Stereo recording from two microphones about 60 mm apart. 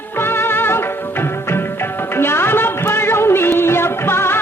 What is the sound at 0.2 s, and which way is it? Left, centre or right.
Music, left.